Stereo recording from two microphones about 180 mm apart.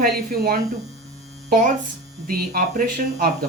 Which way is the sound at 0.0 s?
60° right (ahead or behind).